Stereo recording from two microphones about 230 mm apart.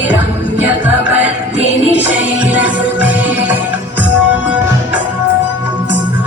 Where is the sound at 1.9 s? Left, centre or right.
Centre.